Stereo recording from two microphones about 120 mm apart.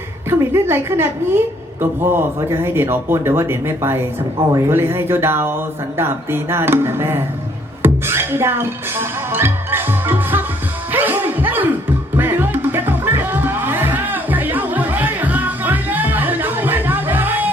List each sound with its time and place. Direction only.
0.3 s speech: 20° right (ahead or behind)
7.8 s music: 20° right (ahead or behind)